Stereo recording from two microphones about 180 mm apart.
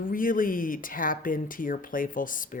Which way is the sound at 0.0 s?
50° left (ahead or behind).